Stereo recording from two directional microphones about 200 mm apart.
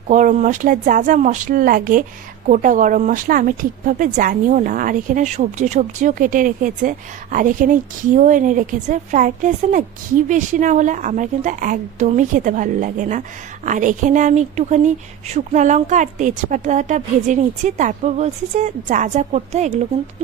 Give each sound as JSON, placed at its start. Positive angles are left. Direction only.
{"t": 0.1, "sound": "a woman's voice", "side_deg": -40}